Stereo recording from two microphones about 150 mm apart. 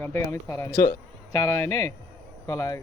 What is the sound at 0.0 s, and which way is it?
Speech, 15° left (ahead or behind).